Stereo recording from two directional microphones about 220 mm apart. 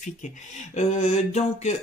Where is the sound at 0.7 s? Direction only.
30° left (ahead or behind).